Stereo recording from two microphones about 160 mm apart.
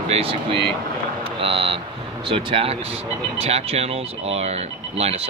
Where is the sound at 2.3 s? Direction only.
35° right (ahead or behind).